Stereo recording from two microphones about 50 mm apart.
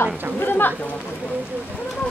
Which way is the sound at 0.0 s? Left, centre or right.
Left.